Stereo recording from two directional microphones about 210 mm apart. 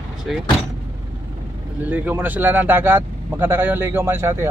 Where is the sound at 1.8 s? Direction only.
10° right (ahead or behind).